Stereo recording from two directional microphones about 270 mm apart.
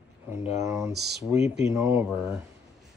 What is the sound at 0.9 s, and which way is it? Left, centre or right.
Speech, right.